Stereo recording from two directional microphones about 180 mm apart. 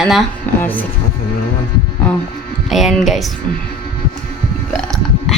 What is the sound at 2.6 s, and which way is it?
Speech, centre (ahead or behind).